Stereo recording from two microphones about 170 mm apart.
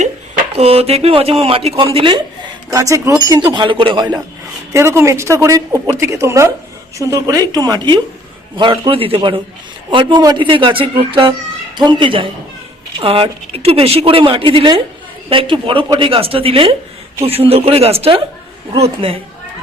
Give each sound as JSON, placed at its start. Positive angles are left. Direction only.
{"t": 0.5, "sound": "speech", "side_deg": -35}
{"t": 2.6, "sound": "speech", "side_deg": -20}